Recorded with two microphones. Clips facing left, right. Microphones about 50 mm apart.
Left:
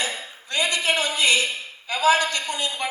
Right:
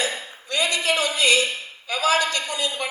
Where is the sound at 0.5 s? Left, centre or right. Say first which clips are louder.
Even; left.